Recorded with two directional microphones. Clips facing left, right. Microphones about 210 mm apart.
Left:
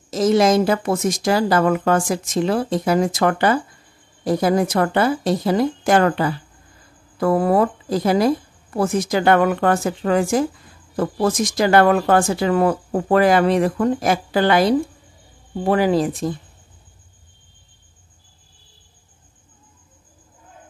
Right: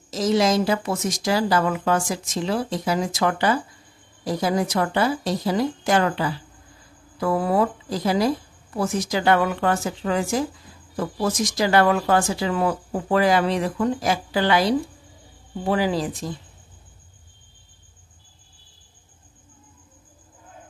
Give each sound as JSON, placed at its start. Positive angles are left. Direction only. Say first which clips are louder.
{"t": 0.1, "sound": "speech", "louder": "left 4 dB", "side_deg": 55}